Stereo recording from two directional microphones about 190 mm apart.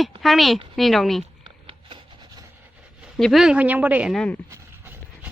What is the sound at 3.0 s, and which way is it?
A woman's voice, centre (ahead or behind).